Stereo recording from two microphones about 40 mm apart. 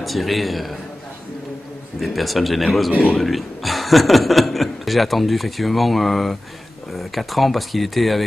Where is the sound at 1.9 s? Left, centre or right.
Centre.